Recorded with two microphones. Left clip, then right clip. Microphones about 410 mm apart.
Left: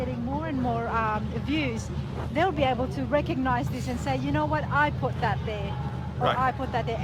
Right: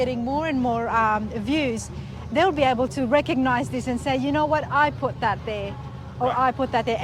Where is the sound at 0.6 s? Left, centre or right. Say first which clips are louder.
Right 5 dB; right.